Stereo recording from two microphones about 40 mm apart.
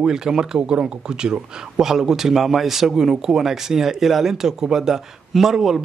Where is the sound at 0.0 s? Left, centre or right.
Centre.